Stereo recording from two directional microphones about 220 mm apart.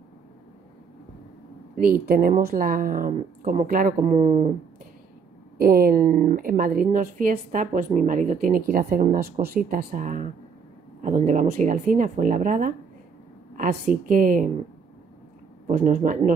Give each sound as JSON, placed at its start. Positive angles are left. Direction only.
{"t": 1.8, "sound": "a woman's voice", "side_deg": -40}
{"t": 5.6, "sound": "a woman's voice", "side_deg": -40}
{"t": 15.7, "sound": "a woman's voice", "side_deg": -35}